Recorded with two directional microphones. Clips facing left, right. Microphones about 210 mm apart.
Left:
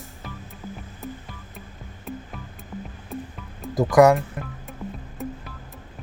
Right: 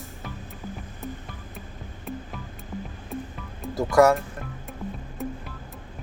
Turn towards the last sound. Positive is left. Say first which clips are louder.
# even
turn(degrees=0)  # may be behind; listen again after turning